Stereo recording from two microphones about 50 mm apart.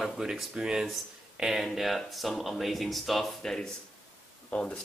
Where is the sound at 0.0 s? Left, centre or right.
Centre.